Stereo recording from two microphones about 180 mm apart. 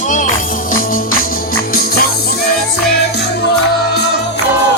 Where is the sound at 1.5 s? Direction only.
55° left (ahead or behind).